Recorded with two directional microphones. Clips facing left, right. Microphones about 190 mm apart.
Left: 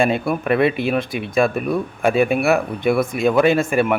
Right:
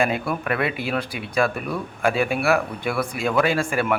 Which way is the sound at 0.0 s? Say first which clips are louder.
Left 4 dB; 25° left (ahead or behind).